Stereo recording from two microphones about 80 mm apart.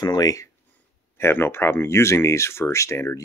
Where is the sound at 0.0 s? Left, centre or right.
Left.